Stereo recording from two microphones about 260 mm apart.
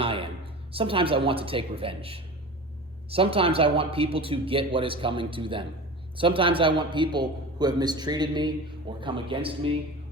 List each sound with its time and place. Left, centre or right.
0.0 s a man's voice: right